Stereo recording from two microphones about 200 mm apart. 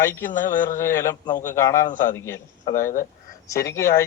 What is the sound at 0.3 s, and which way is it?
Speech, 40° left (ahead or behind).